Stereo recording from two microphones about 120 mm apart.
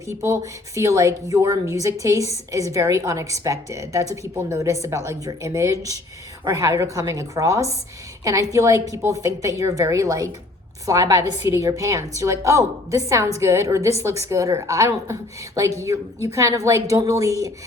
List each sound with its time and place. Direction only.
0.2 s a woman's voice: 25° right (ahead or behind)